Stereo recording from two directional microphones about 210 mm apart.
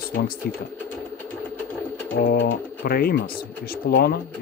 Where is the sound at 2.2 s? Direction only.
45° left (ahead or behind).